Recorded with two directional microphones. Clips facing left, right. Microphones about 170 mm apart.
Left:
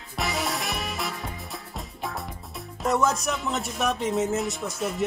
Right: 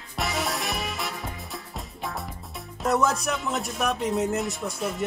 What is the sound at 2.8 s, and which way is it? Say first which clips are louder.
Speech: even; centre (ahead or behind).